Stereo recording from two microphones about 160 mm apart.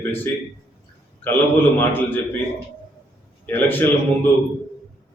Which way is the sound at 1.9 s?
10° left (ahead or behind).